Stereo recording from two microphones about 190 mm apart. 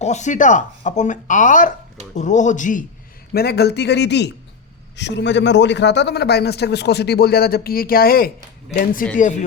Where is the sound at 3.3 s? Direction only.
55° left (ahead or behind).